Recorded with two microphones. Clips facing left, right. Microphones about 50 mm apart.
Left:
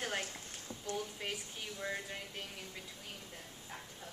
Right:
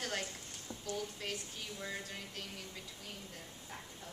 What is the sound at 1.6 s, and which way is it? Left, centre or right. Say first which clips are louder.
Speech: left 2 dB; centre.